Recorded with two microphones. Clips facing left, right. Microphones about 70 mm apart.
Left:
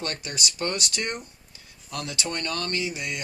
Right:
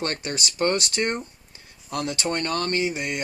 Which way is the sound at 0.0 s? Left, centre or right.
Right.